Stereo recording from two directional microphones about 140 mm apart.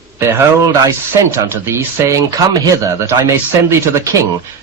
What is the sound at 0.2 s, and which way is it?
Speech, 20° right (ahead or behind).